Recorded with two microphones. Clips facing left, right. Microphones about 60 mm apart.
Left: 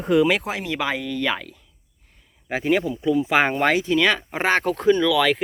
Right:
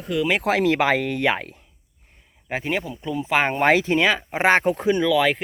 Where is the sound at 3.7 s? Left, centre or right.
Right.